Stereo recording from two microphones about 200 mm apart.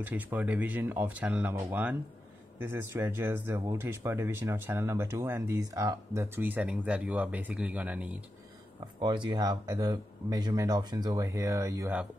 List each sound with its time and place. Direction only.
0.0 s speech: 10° right (ahead or behind)
9.0 s speech: 25° right (ahead or behind)